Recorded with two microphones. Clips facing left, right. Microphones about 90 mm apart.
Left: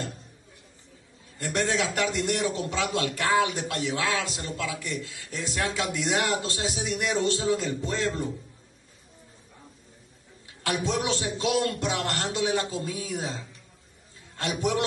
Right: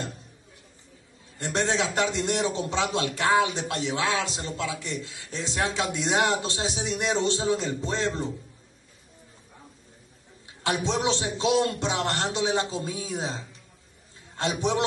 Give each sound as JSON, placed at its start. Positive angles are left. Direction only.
{"t": 1.4, "sound": "a man's voice", "side_deg": -25}
{"t": 10.6, "sound": "a man's voice", "side_deg": -20}